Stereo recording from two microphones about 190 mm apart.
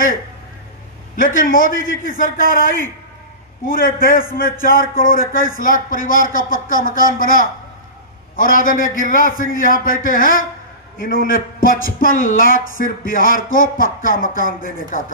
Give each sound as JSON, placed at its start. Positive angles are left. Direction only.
{"t": 1.1, "sound": "speech", "side_deg": 45}